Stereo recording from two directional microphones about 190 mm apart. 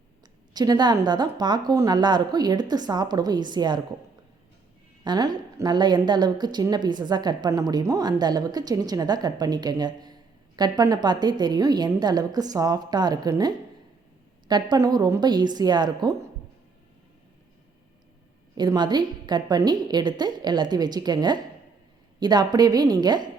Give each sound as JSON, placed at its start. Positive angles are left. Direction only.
{"t": 0.5, "sound": "a woman's voice", "side_deg": -20}
{"t": 5.0, "sound": "a woman's voice", "side_deg": -20}
{"t": 18.5, "sound": "a woman's voice", "side_deg": -20}